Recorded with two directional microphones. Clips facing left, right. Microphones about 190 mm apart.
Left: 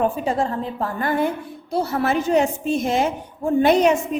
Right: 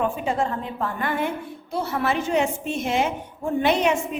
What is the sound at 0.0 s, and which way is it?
A woman's voice, 35° left (ahead or behind).